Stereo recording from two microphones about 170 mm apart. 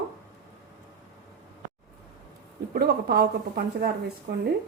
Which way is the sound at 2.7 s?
65° right (ahead or behind).